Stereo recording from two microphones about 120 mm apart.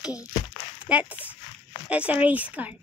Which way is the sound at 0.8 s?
10° right (ahead or behind).